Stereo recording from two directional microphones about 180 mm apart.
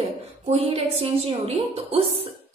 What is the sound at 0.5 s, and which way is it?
A woman's voice, 35° right (ahead or behind).